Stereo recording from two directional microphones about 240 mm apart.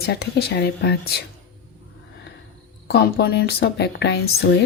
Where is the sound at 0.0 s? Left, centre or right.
Left.